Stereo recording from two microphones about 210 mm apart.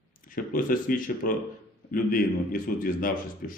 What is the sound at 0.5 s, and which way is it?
Speech, 40° left (ahead or behind).